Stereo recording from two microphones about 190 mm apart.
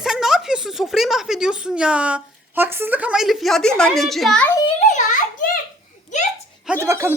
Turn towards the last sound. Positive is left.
turn(degrees=-15)  # may be behind; listen again after turning